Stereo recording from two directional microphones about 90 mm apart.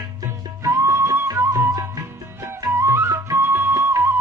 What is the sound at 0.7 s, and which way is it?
Music, 30° right (ahead or behind).